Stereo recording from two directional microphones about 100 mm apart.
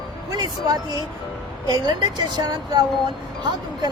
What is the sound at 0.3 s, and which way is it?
A woman's voice, 40° right (ahead or behind).